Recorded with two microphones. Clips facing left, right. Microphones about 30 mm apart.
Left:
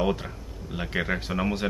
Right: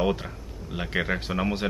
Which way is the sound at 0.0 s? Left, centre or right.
Centre.